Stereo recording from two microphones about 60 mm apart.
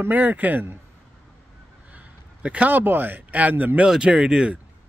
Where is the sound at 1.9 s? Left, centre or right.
Right.